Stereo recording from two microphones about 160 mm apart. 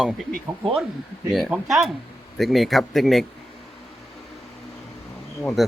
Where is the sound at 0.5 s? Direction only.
25° right (ahead or behind).